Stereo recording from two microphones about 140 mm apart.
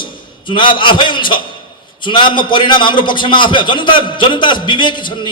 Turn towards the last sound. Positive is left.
turn(degrees=35)  # may be behind; listen again after turning